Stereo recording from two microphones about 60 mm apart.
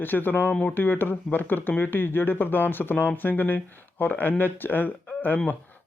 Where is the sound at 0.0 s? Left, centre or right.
Left.